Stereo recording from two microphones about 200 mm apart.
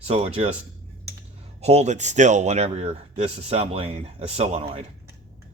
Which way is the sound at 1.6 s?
30° right (ahead or behind).